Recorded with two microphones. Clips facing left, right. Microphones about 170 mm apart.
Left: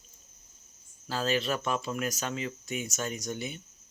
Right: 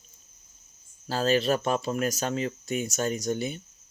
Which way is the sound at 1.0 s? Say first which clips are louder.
Right 5 dB; 35° right (ahead or behind).